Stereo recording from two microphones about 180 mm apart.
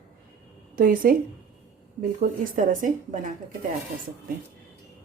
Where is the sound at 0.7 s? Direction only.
50° right (ahead or behind).